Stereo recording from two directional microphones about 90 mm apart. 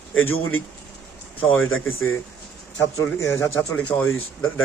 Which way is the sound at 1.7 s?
25° left (ahead or behind).